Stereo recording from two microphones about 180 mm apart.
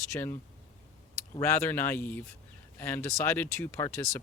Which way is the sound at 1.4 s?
10° left (ahead or behind).